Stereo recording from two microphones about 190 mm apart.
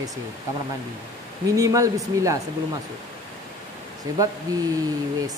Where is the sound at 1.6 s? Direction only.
15° right (ahead or behind).